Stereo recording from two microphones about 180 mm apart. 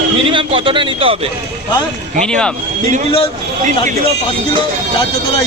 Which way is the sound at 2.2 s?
5° left (ahead or behind).